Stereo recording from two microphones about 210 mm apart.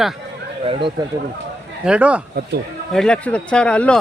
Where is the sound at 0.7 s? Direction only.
25° right (ahead or behind).